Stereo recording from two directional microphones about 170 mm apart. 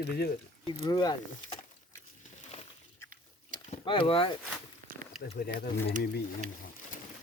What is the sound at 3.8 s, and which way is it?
Speech, 30° left (ahead or behind).